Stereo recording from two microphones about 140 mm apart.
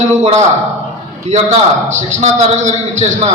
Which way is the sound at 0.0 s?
55° right (ahead or behind).